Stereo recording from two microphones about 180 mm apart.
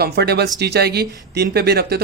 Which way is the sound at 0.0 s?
65° right (ahead or behind).